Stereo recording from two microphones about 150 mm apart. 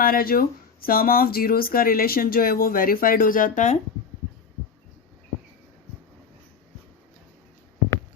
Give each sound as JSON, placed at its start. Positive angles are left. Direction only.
{"t": 0.0, "sound": "speech", "side_deg": 75}